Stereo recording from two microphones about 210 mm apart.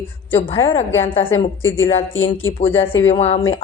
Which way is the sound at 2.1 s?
65° left (ahead or behind).